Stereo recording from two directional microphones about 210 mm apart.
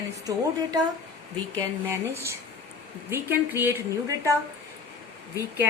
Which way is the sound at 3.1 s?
10° right (ahead or behind).